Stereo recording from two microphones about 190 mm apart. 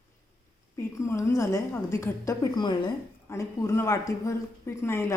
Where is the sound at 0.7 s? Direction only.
15° left (ahead or behind).